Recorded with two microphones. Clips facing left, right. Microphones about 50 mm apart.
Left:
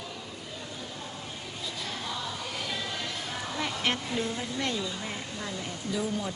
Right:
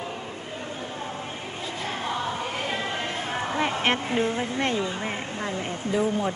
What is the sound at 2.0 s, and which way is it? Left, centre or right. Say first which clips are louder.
Music: right 7 dB; right.